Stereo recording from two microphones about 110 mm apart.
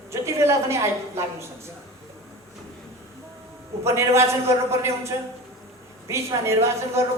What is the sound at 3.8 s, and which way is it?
A man's voice, 25° right (ahead or behind).